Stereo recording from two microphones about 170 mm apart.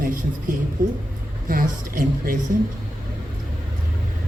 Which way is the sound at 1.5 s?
55° right (ahead or behind).